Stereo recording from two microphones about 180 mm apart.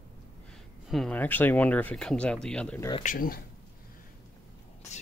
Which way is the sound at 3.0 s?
50° left (ahead or behind).